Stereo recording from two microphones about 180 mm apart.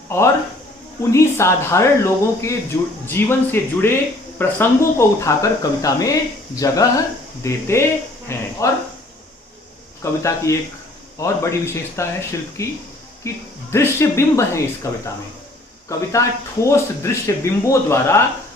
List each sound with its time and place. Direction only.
0.1 s speech: 15° left (ahead or behind)
10.0 s speech: 15° left (ahead or behind)